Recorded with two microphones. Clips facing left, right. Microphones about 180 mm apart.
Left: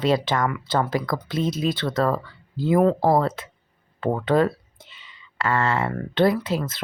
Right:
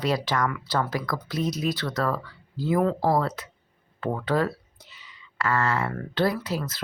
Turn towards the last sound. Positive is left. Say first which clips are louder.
# left 5 dB
turn(degrees=25)  # may be behind; listen again after turning